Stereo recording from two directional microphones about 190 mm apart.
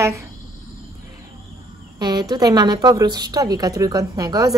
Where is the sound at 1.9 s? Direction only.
20° right (ahead or behind).